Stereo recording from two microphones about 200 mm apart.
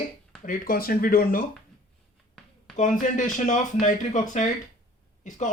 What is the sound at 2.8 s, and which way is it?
Speech, 40° left (ahead or behind).